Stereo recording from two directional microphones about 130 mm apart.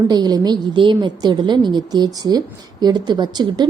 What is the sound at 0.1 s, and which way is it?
A woman's voice, 30° right (ahead or behind).